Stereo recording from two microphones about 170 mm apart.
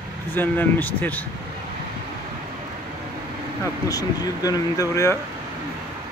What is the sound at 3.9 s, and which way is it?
Speech, 20° left (ahead or behind).